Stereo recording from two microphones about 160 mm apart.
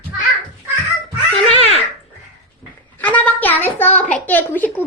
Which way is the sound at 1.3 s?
35° left (ahead or behind).